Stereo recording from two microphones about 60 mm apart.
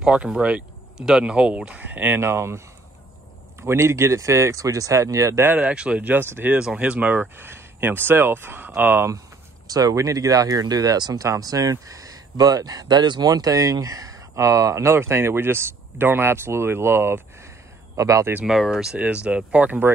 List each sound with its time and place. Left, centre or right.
0.0 s speech: centre
0.9 s speech: centre
1.8 s speech: right
3.6 s speech: right
5.6 s speech: right
6.0 s speech: right
6.8 s speech: right
9.7 s speech: right
17.9 s speech: right
18.4 s speech: centre
18.9 s speech: centre